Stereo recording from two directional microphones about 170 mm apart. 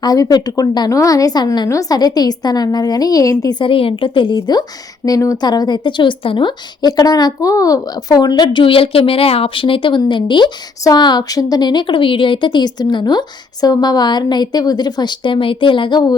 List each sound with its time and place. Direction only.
0.0 s a woman's voice: 25° left (ahead or behind)